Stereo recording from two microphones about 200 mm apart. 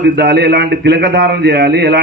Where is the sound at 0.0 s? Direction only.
55° right (ahead or behind).